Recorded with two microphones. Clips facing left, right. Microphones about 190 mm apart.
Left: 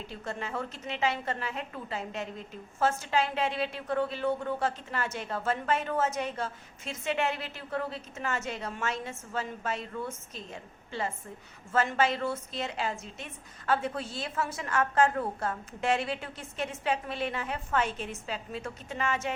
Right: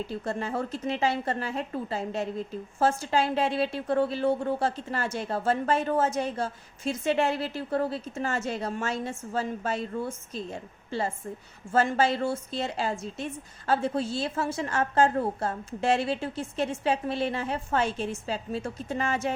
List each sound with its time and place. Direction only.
0.1 s a woman's voice: 35° right (ahead or behind)